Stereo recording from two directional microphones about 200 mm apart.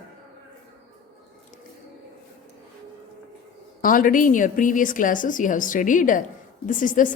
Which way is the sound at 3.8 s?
45° left (ahead or behind).